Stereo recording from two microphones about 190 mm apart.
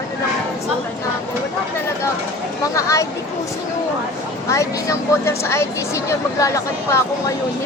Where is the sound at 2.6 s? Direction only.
15° left (ahead or behind).